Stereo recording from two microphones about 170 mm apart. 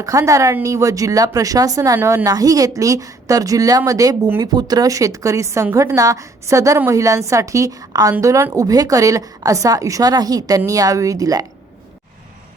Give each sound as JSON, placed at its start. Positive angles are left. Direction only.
{"t": 0.0, "sound": "speech", "side_deg": -20}